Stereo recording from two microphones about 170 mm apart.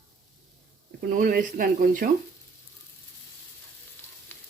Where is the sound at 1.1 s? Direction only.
55° right (ahead or behind).